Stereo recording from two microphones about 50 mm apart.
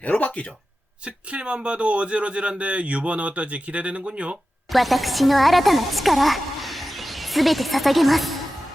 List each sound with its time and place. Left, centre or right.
0.0 s speech: left
1.0 s speech: right
4.7 s speech: centre